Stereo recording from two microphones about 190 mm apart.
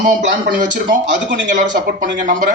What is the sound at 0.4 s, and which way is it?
Speech, 65° right (ahead or behind).